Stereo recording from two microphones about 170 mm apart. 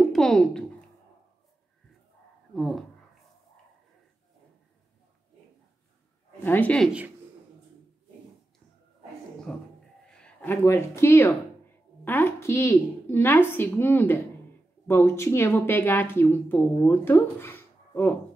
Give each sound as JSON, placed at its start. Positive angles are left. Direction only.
{"t": 0.1, "sound": "a sound", "side_deg": 0}
{"t": 2.5, "sound": "speech", "side_deg": 0}
{"t": 6.4, "sound": "speech", "side_deg": 10}
{"t": 9.5, "sound": "speech", "side_deg": 5}